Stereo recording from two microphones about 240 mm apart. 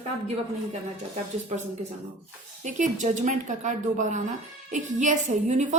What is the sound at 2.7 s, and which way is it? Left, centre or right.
A woman's voice, right.